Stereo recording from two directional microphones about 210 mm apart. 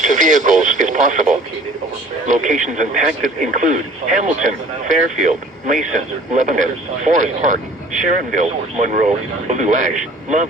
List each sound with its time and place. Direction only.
0.0 s speech: 35° right (ahead or behind)